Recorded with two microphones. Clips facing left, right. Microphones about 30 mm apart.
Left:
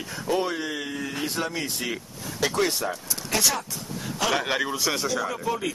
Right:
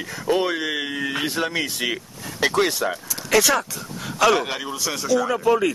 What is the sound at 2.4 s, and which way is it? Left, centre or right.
Speech, right.